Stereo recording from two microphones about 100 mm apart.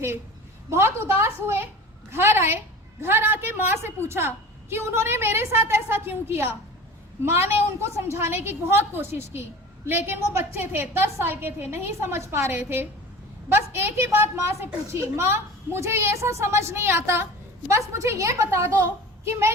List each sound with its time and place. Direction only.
0.7 s a woman's voice: 25° right (ahead or behind)
2.0 s a woman's voice: 25° right (ahead or behind)